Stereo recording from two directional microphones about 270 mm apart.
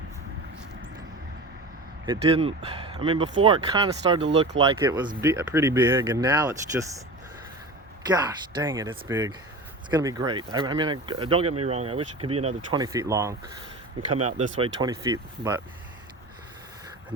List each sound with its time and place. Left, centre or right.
2.0 s speech: centre
4.2 s speech: right
4.8 s speech: centre
8.0 s speech: centre
14.3 s speech: right